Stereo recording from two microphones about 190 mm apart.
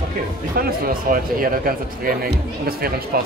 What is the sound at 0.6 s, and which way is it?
Speech, 50° right (ahead or behind).